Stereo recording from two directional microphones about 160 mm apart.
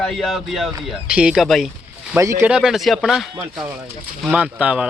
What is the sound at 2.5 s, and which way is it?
Speech, 5° right (ahead or behind).